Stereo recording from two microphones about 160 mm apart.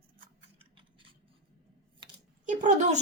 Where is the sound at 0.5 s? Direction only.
30° right (ahead or behind).